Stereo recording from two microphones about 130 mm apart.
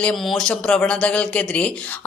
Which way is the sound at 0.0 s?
5° left (ahead or behind).